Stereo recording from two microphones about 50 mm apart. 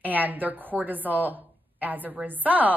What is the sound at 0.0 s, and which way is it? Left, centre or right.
A woman's voice, right.